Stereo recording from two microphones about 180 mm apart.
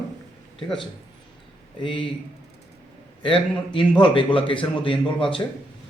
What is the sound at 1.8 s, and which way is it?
Speech, 25° left (ahead or behind).